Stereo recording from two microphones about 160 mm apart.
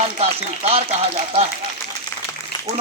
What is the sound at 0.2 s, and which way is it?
Speech, 40° right (ahead or behind).